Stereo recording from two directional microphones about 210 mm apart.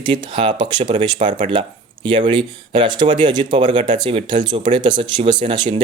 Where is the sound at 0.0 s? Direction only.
25° right (ahead or behind).